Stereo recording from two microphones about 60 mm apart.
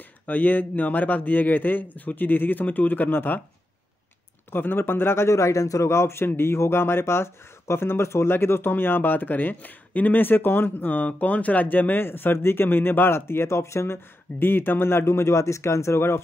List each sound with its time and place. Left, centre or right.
0.3 s a man's voice: left
4.5 s a man's voice: left
14.4 s a man's voice: left